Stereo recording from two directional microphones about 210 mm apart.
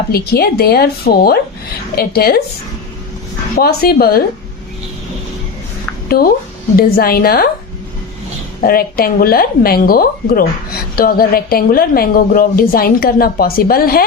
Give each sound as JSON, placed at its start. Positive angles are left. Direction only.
{"t": 0.1, "sound": "a woman's voice", "side_deg": 45}
{"t": 3.5, "sound": "a woman's voice", "side_deg": 45}
{"t": 6.1, "sound": "a woman's voice", "side_deg": 45}
{"t": 8.6, "sound": "a woman's voice", "side_deg": 45}